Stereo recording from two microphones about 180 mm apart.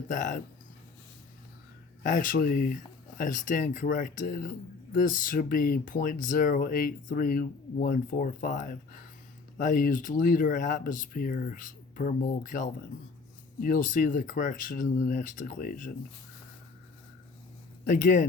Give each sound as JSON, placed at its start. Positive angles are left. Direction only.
{"t": 0.1, "sound": "speech", "side_deg": 45}
{"t": 2.0, "sound": "speech", "side_deg": 50}
{"t": 17.8, "sound": "speech", "side_deg": 45}